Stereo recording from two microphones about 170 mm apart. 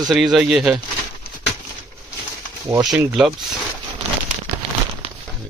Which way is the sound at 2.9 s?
5° right (ahead or behind).